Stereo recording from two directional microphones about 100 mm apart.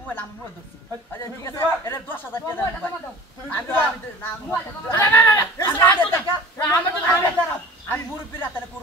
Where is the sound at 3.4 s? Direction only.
20° left (ahead or behind).